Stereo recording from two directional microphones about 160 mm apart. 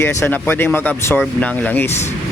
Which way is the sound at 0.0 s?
15° left (ahead or behind).